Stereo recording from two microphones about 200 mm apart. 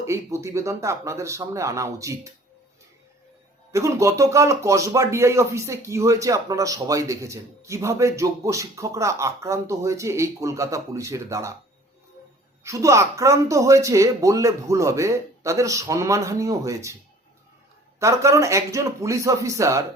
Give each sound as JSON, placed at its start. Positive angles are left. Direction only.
{"t": 0.0, "sound": "speech", "side_deg": -15}
{"t": 3.7, "sound": "speech", "side_deg": -15}
{"t": 12.6, "sound": "speech", "side_deg": -15}
{"t": 18.0, "sound": "speech", "side_deg": -15}